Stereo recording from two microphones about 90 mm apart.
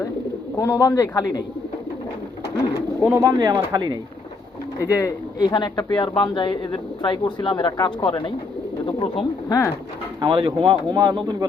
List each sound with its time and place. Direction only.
0.6 s speech: 40° left (ahead or behind)
3.0 s speech: 25° right (ahead or behind)
3.2 s speech: 45° right (ahead or behind)
4.9 s speech: 40° left (ahead or behind); by 9.2 s 70° left (ahead or behind)
9.5 s speech: 35° left (ahead or behind)
10.2 s speech: 55° right (ahead or behind)